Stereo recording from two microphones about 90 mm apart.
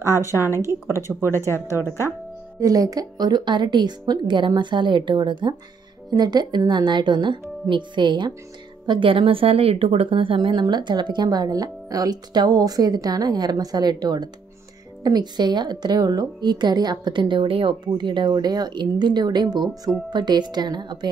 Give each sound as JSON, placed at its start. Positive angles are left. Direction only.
{"t": 0.6, "sound": "speech", "side_deg": -30}
{"t": 1.2, "sound": "speech", "side_deg": 30}
{"t": 2.6, "sound": "a woman's voice", "side_deg": -40}
{"t": 8.8, "sound": "a woman's voice", "side_deg": -70}